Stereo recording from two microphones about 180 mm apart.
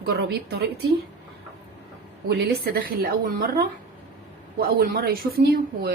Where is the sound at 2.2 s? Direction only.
60° right (ahead or behind).